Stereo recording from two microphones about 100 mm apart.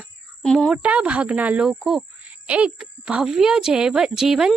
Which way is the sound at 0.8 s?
10° right (ahead or behind).